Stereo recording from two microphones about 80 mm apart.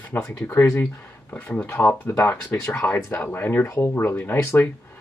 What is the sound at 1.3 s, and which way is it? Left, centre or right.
Speech, centre.